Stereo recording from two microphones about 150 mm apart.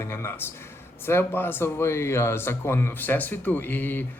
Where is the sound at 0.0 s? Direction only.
15° left (ahead or behind).